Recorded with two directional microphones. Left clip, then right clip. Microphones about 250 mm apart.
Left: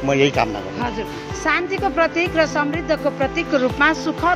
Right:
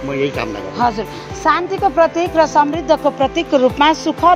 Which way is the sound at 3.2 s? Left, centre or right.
Right.